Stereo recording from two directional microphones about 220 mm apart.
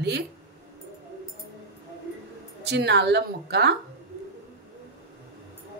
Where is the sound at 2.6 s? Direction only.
50° right (ahead or behind).